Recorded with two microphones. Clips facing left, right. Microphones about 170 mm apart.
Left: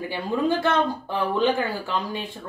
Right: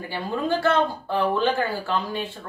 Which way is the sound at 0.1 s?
15° left (ahead or behind).